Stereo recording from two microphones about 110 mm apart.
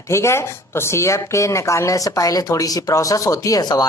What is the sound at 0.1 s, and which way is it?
A woman's voice, 25° left (ahead or behind).